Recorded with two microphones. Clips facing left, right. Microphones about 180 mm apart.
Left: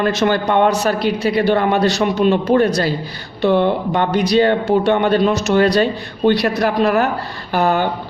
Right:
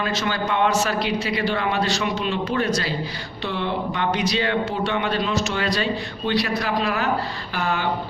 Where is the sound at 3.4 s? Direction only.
55° left (ahead or behind).